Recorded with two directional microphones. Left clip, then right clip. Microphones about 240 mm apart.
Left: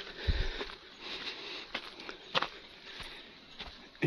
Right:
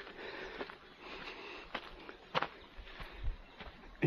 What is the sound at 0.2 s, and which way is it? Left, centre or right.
Sniff, centre.